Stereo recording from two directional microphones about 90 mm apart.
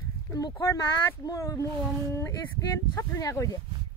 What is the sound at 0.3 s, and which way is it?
Speech, 35° left (ahead or behind).